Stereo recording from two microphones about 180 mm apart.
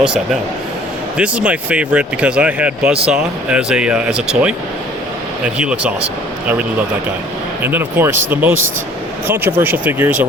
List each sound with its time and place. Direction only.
0.0 s speech: 5° right (ahead or behind)
5.5 s speech: 5° right (ahead or behind)